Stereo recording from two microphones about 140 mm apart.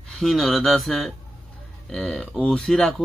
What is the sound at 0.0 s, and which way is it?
Speech, centre (ahead or behind).